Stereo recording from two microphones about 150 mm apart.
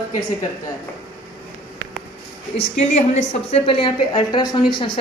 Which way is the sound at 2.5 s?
50° left (ahead or behind).